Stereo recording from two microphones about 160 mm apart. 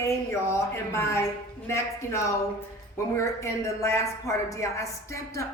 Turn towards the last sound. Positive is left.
turn(degrees=20)  # may be behind; listen again after turning